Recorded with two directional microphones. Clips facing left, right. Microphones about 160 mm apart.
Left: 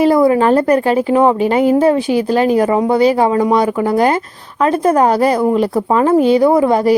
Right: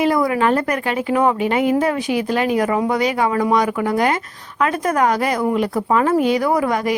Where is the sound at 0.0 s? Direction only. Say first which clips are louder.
Left 6 dB; 30° left (ahead or behind).